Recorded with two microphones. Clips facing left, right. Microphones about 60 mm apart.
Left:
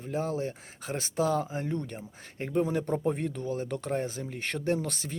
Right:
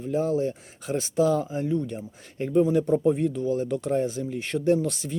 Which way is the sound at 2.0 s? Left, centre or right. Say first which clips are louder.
Right 6 dB; left.